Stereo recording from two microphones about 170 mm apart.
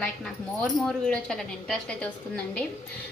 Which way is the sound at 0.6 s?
5° left (ahead or behind).